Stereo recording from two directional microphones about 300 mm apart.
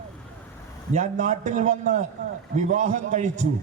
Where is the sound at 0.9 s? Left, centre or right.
Right.